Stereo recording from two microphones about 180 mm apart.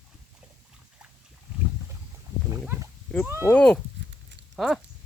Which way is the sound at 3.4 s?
5° left (ahead or behind).